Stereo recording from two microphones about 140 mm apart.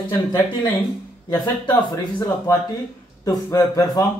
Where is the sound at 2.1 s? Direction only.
25° left (ahead or behind).